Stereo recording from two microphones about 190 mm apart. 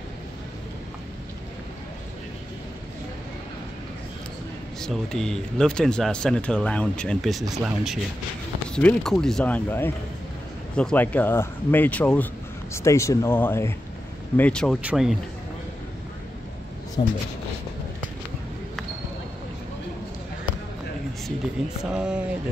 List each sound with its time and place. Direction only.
4.7 s speech: 5° left (ahead or behind)
17.0 s speech: 25° left (ahead or behind)
21.6 s speech: centre (ahead or behind)